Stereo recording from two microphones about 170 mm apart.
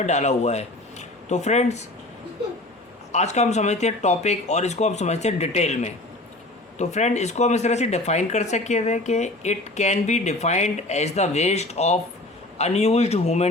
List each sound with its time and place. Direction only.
0.0 s speech: 45° left (ahead or behind)
3.1 s speech: 40° left (ahead or behind)